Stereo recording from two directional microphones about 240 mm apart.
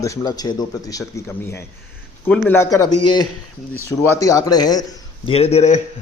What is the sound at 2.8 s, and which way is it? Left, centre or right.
Speech, left.